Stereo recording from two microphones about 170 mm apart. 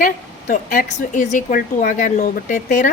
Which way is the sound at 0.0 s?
50° left (ahead or behind).